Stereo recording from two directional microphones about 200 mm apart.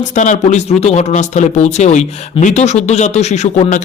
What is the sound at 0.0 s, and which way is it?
Speech, 40° left (ahead or behind).